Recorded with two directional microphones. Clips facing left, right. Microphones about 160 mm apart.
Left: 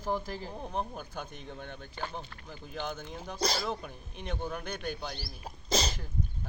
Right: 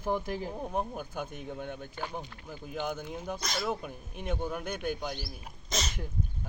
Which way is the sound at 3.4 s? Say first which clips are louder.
Left 9 dB; 30° left (ahead or behind).